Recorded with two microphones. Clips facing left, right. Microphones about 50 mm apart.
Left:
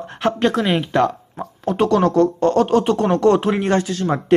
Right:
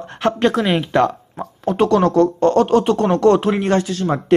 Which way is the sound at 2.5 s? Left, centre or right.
Right.